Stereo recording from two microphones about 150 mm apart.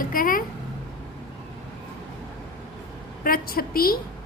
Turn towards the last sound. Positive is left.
turn(degrees=80)